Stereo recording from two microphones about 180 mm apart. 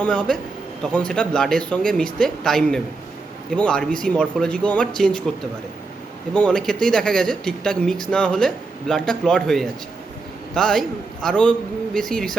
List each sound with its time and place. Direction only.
0.0 s speech: 5° left (ahead or behind)
6.3 s speech: 5° left (ahead or behind)